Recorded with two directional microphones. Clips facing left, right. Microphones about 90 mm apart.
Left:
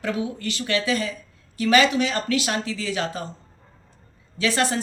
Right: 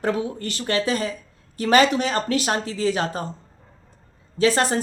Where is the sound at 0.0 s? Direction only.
40° right (ahead or behind).